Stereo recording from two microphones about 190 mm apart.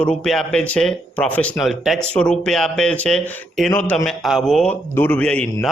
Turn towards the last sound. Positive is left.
turn(degrees=5)  # may be behind; listen again after turning